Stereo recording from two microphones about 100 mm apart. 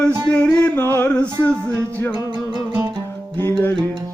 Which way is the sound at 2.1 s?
45° right (ahead or behind).